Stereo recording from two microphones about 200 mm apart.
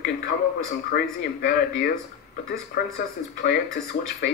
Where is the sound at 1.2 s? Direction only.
50° left (ahead or behind).